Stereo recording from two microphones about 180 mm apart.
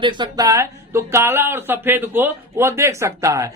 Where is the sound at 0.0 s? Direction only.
25° right (ahead or behind).